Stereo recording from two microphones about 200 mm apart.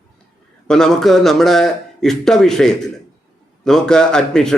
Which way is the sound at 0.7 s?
5° left (ahead or behind).